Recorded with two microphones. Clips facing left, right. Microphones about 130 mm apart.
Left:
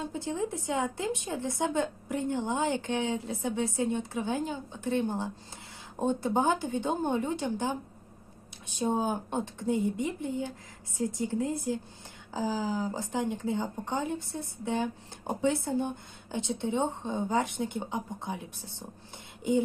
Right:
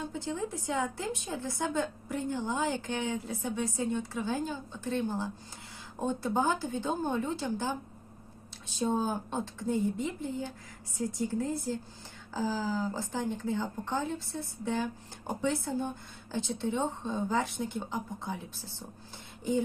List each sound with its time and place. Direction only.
0.1 s a woman's voice: 20° left (ahead or behind)
10.9 s a woman's voice: 20° left (ahead or behind)